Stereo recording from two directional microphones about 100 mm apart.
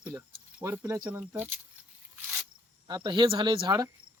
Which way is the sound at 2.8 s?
45° right (ahead or behind).